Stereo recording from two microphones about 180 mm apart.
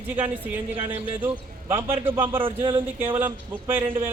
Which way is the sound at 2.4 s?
30° right (ahead or behind).